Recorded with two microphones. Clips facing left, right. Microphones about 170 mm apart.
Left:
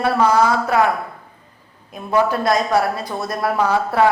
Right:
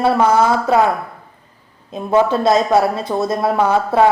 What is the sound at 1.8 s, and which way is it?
A woman's voice, 25° right (ahead or behind).